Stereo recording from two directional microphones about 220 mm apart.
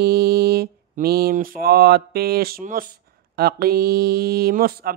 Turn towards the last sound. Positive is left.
turn(degrees=-40)  # may be behind; listen again after turning